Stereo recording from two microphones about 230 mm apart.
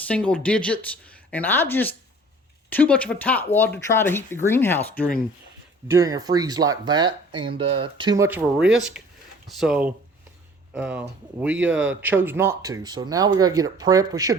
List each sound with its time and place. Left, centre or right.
0.0 s speech: centre
5.9 s speech: centre